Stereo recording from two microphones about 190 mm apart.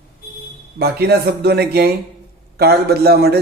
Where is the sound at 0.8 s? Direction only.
55° right (ahead or behind).